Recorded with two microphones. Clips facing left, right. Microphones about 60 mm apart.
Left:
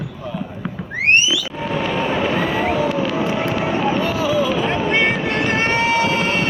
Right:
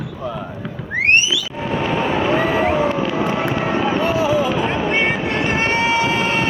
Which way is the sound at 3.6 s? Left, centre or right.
Right.